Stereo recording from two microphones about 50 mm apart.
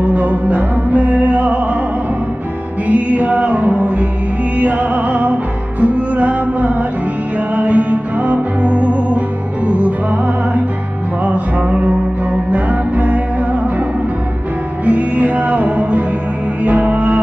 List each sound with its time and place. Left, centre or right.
0.0 s music: right
2.9 s music: right
11.2 s music: right
14.9 s music: right